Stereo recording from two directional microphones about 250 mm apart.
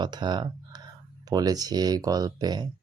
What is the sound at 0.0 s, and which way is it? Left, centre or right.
Speech, centre.